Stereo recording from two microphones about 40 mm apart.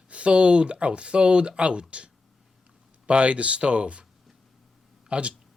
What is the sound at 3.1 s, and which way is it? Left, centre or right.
Speech, right.